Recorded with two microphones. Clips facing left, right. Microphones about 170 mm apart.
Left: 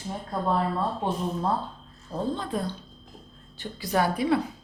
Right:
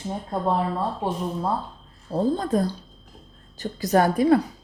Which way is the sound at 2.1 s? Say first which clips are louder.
Right 7 dB; 40° right (ahead or behind).